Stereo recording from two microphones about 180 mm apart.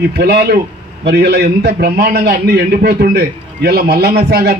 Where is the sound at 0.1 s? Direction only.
65° right (ahead or behind).